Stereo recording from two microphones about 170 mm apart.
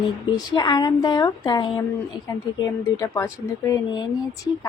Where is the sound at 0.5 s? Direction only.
25° left (ahead or behind).